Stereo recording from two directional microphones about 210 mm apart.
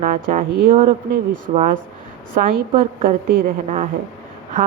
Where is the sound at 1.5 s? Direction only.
30° right (ahead or behind).